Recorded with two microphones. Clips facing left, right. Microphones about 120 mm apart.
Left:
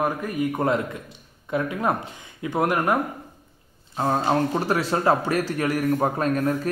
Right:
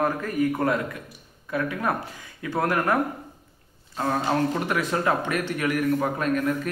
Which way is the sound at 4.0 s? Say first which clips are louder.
Left 2 dB; 30° left (ahead or behind).